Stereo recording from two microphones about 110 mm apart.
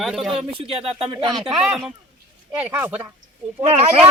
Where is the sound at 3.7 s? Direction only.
60° right (ahead or behind).